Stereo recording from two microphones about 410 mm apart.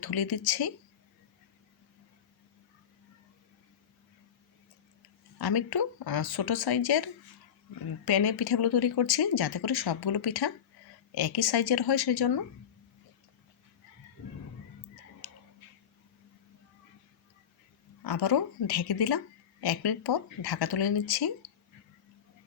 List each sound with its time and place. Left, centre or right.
0.0 s speech: left
5.4 s speech: left
15.2 s a sound: left
18.0 s speech: left